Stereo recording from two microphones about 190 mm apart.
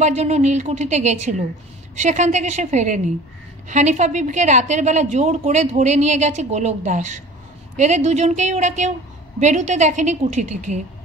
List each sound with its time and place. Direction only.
0.0 s a woman's voice: 35° right (ahead or behind)